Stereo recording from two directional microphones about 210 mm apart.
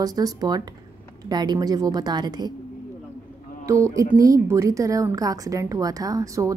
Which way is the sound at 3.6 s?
15° right (ahead or behind).